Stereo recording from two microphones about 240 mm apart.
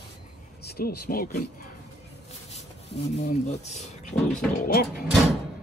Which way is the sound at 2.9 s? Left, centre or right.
Left.